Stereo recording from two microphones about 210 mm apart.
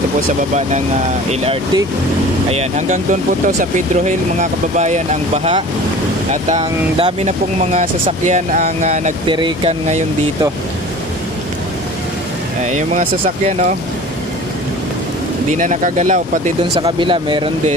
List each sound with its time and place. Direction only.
0.6 s speech: 35° right (ahead or behind)
2.5 s speech: 35° right (ahead or behind)
12.6 s speech: 35° right (ahead or behind)
15.5 s speech: 35° right (ahead or behind)